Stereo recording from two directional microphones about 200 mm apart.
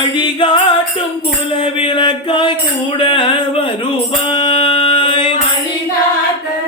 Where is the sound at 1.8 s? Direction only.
25° left (ahead or behind).